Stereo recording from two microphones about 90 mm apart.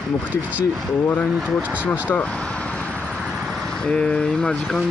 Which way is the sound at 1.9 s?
20° left (ahead or behind).